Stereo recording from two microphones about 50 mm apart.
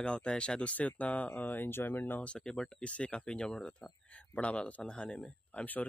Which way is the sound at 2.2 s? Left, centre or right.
Centre.